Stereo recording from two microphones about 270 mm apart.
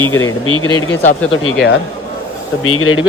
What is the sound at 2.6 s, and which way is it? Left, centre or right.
Speech, left.